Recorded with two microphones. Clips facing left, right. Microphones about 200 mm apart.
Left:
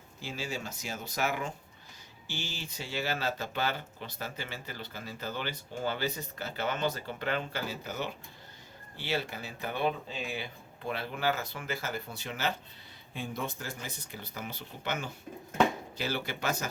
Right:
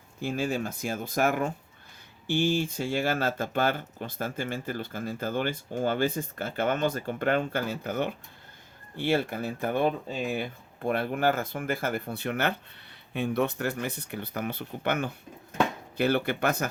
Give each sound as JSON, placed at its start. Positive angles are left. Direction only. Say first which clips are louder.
{"t": 0.2, "sound": "speech", "louder": "right 9 dB", "side_deg": -55}